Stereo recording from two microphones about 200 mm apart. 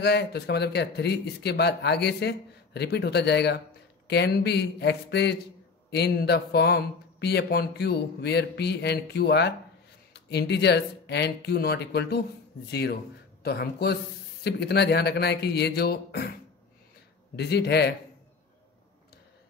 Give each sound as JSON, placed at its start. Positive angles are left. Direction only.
{"t": 0.0, "sound": "speech", "side_deg": 55}
{"t": 13.4, "sound": "a man's voice", "side_deg": 50}
{"t": 17.4, "sound": "speech", "side_deg": 55}